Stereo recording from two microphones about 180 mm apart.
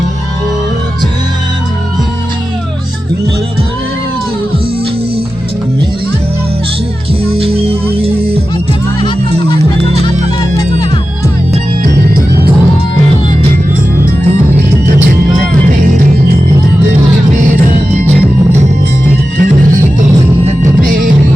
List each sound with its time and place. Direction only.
7.3 s music: 35° right (ahead or behind)
9.0 s music: 25° left (ahead or behind)
11.9 s music: 60° right (ahead or behind)
17.4 s music: 45° right (ahead or behind)
19.4 s music: 50° right (ahead or behind)